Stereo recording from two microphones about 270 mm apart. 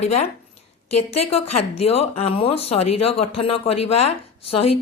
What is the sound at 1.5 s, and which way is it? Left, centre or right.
Speech, left.